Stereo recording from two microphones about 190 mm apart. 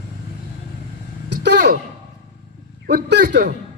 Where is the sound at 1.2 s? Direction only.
60° right (ahead or behind).